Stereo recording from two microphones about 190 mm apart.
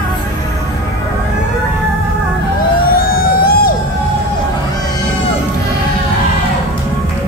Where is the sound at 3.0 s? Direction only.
50° left (ahead or behind).